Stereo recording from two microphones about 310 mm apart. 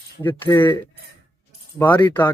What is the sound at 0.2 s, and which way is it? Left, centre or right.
Speech, centre.